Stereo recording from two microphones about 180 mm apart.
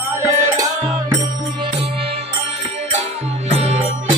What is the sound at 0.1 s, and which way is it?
Music, 15° right (ahead or behind).